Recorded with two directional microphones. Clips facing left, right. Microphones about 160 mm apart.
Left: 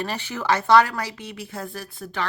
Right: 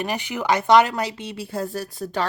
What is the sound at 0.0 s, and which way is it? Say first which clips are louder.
A woman's voice: right 2 dB; 15° right (ahead or behind).